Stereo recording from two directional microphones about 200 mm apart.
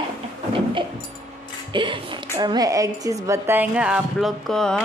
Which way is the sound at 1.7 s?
25° right (ahead or behind).